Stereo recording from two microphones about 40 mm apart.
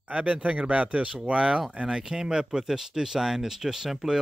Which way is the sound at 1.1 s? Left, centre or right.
Centre.